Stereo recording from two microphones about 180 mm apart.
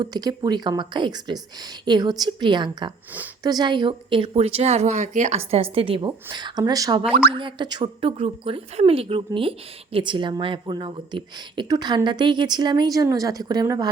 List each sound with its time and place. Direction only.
0.0 s a woman's voice: 20° right (ahead or behind)